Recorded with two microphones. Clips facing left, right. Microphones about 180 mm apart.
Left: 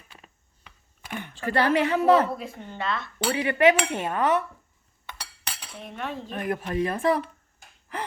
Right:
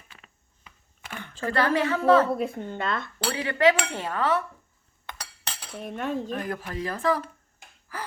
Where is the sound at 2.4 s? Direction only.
50° right (ahead or behind).